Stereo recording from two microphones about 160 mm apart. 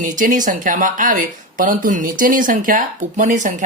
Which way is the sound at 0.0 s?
55° right (ahead or behind).